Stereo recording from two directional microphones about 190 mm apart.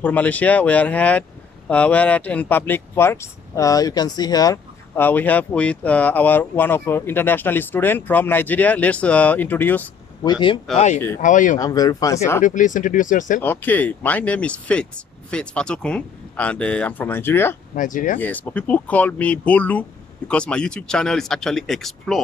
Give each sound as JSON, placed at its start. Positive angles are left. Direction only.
{"t": 0.0, "sound": "speech", "side_deg": 10}
{"t": 10.2, "sound": "speech", "side_deg": 25}
{"t": 11.1, "sound": "speech", "side_deg": 40}
{"t": 11.5, "sound": "speech", "side_deg": 20}
{"t": 12.4, "sound": "speech", "side_deg": 40}
{"t": 13.4, "sound": "speech", "side_deg": 10}
{"t": 17.7, "sound": "speech", "side_deg": 45}
{"t": 18.2, "sound": "speech", "side_deg": 10}